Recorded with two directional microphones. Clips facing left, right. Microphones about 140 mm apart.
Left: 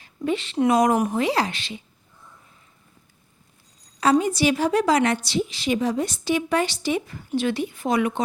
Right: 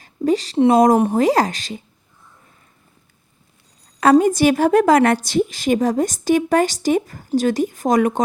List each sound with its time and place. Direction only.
0.0 s a woman's voice: 40° right (ahead or behind)
4.0 s a woman's voice: 50° right (ahead or behind)